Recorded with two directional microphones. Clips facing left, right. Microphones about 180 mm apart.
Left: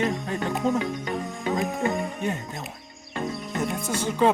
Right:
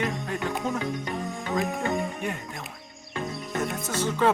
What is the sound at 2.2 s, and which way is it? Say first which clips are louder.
Speech: left 3 dB; 20° left (ahead or behind).